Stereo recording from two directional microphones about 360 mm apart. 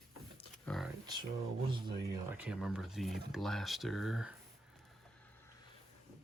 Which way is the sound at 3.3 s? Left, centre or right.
Centre.